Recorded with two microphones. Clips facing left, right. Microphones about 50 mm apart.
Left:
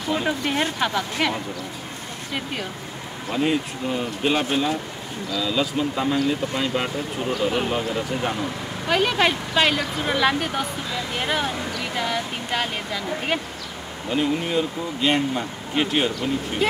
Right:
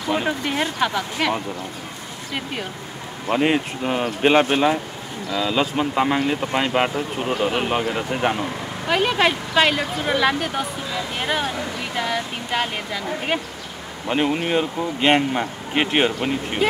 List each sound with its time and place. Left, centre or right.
0.5 s a woman's voice: centre
3.3 s speech: right
8.8 s speech: centre
14.0 s speech: right